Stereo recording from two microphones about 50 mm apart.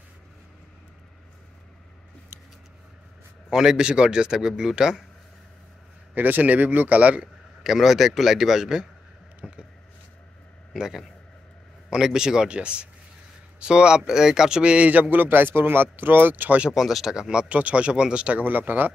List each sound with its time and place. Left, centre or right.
3.4 s a man's voice: centre
6.1 s a man's voice: right
7.6 s a man's voice: centre
9.4 s a sound: right
10.7 s a man's voice: centre; by 16.5 s right
16.7 s a man's voice: centre; by 18.4 s right
18.4 s a man's voice: right